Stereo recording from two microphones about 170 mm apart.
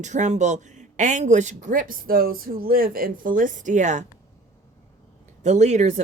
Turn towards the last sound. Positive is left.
turn(degrees=-45)  # may be behind; listen again after turning